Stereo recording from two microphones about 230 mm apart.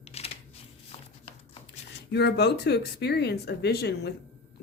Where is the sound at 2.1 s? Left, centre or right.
Left.